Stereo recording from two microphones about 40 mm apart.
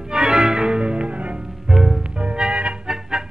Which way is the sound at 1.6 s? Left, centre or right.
Centre.